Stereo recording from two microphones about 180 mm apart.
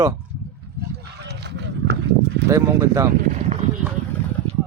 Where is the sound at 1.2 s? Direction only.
70° right (ahead or behind).